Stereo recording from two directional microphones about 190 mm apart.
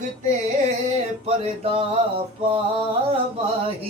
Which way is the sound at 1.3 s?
30° right (ahead or behind).